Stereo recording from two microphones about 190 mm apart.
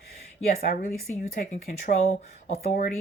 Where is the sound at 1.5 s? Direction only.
40° left (ahead or behind).